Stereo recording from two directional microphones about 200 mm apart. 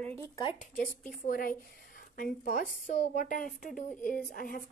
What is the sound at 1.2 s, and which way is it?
A woman's voice, 50° left (ahead or behind).